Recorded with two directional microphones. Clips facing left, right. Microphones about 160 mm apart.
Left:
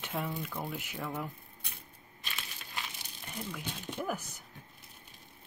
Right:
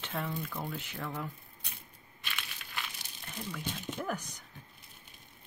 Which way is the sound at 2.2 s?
35° left (ahead or behind).